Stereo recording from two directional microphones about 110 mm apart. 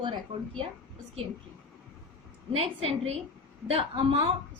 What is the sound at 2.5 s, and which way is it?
A woman's voice, 65° right (ahead or behind).